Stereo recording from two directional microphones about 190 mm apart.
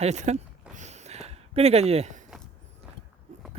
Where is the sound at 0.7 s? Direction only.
40° right (ahead or behind).